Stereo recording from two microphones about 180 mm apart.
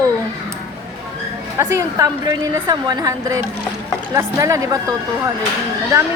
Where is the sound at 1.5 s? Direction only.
20° right (ahead or behind).